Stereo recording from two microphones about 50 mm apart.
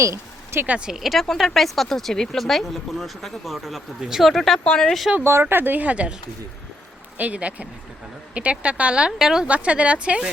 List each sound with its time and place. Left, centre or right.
0.0 s a sound: right
0.9 s speech: centre
1.2 s speech: centre
5.2 s speech: right
7.2 s a woman's voice: right
9.1 s speech: centre
9.5 s a woman's voice: right